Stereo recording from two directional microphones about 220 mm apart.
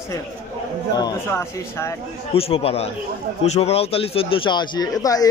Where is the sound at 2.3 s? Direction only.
25° left (ahead or behind).